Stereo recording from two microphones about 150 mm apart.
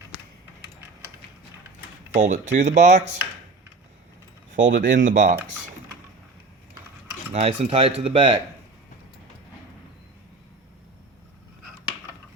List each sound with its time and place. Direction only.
2.1 s speech: 55° right (ahead or behind)
4.6 s speech: 60° right (ahead or behind)
7.3 s speech: 45° right (ahead or behind)